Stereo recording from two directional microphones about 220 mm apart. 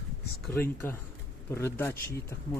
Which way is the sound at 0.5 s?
10° left (ahead or behind).